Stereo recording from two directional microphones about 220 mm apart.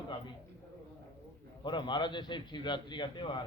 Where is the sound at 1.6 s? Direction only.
20° left (ahead or behind).